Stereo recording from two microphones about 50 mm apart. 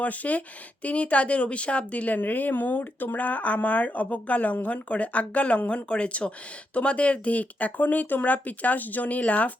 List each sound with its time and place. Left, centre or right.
0.0 s speech: left